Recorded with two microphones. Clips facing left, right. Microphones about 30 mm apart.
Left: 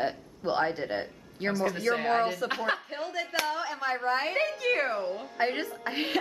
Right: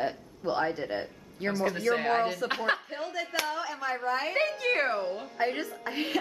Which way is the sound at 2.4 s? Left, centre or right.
Centre.